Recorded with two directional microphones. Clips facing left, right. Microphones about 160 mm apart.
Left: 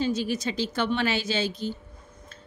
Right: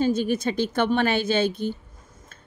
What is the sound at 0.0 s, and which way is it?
Speech, 50° right (ahead or behind).